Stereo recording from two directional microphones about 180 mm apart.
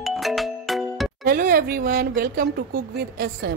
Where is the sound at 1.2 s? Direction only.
50° right (ahead or behind).